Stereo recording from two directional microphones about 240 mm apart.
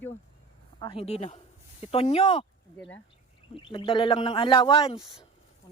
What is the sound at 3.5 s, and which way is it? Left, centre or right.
Speech, left.